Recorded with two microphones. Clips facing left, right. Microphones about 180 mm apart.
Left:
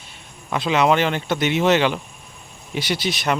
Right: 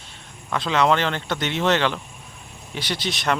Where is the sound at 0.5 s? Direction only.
10° left (ahead or behind).